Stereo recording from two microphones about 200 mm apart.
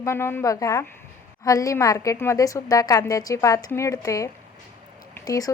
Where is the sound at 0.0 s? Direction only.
10° left (ahead or behind).